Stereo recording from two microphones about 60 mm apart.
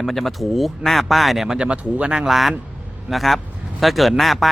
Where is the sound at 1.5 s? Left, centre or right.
Centre.